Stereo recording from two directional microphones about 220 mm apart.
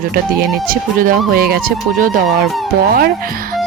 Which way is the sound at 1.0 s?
40° right (ahead or behind).